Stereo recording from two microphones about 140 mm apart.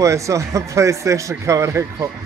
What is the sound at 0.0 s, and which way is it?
A man's voice, 20° right (ahead or behind).